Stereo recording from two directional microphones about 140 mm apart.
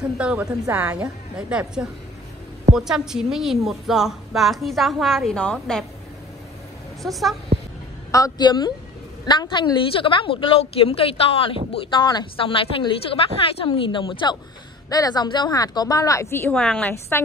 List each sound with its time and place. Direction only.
0.2 s a woman's voice: 10° right (ahead or behind)
7.0 s a woman's voice: centre (ahead or behind)
8.1 s a woman's voice: 25° left (ahead or behind)
16.5 s a woman's voice: 5° left (ahead or behind)